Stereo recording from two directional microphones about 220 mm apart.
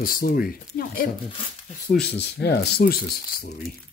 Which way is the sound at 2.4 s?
50° left (ahead or behind).